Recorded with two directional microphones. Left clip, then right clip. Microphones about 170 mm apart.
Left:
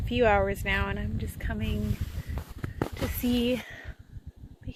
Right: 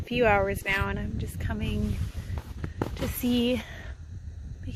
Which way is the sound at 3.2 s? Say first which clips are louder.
Right 1 dB; 25° right (ahead or behind).